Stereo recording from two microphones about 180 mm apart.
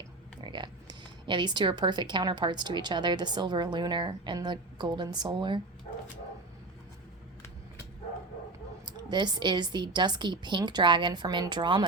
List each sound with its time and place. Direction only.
0.4 s speech: 25° right (ahead or behind)
9.0 s speech: 25° right (ahead or behind)